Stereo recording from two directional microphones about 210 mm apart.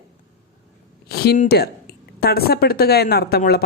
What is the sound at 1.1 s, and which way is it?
Speech, 50° left (ahead or behind).